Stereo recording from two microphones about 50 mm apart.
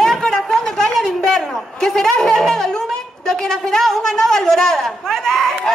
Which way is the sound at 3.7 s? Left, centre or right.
Centre.